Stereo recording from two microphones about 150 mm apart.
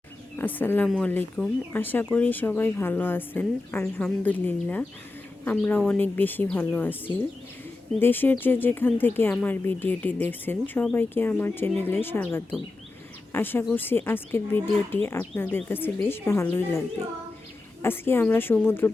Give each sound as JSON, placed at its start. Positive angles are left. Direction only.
{"t": 0.3, "sound": "speech", "side_deg": 15}
{"t": 17.8, "sound": "speech", "side_deg": 15}